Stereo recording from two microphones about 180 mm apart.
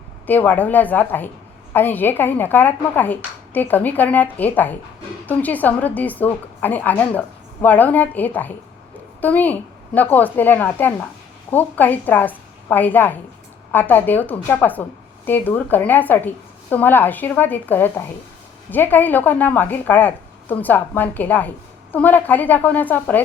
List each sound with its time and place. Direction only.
0.3 s a woman's voice: 10° left (ahead or behind)